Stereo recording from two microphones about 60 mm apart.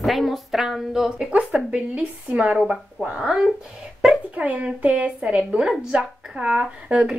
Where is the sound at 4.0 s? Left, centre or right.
Centre.